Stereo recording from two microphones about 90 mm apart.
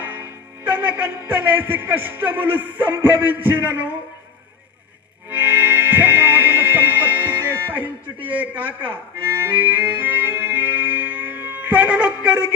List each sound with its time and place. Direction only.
0.0 s a man's voice: 20° right (ahead or behind)
5.3 s music: 20° right (ahead or behind)